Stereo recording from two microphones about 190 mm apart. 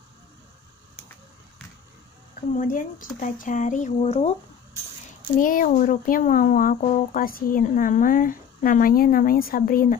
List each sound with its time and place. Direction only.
2.5 s speech: 45° left (ahead or behind)
5.4 s speech: 45° left (ahead or behind)